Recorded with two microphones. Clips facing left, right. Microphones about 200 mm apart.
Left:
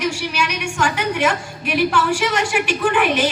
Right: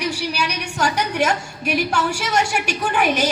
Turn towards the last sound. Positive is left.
turn(degrees=-40)  # may be behind; listen again after turning